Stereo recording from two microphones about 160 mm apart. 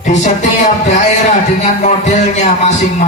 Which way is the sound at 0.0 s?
50° left (ahead or behind).